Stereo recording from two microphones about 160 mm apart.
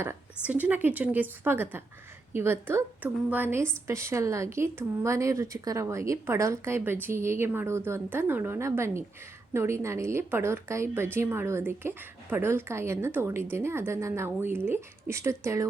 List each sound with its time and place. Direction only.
0.4 s a woman's voice: 10° right (ahead or behind)